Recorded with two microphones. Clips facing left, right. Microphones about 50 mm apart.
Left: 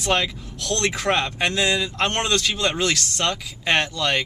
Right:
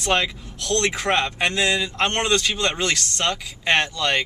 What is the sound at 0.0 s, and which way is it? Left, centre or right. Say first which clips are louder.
Speech: even; centre.